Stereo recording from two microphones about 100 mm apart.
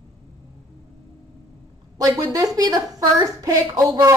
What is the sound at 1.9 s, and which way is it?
A woman's voice, 35° right (ahead or behind).